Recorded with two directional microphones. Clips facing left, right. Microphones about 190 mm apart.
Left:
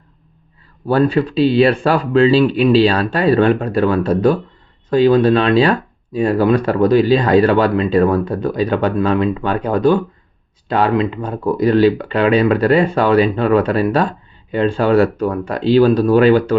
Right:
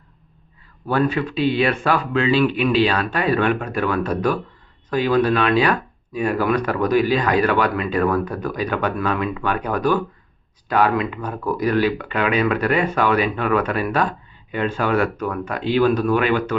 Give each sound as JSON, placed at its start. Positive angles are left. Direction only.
{"t": 0.9, "sound": "speech", "side_deg": 30}